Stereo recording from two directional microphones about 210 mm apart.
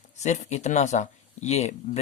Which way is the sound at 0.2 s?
35° left (ahead or behind).